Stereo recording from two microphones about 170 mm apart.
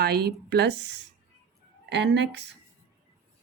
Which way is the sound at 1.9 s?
90° right.